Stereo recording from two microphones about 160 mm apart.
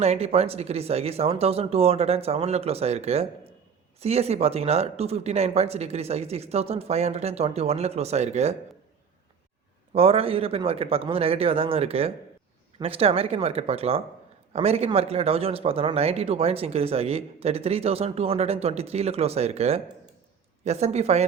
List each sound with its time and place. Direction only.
0.0 s speech: 40° right (ahead or behind)
9.9 s speech: 35° right (ahead or behind)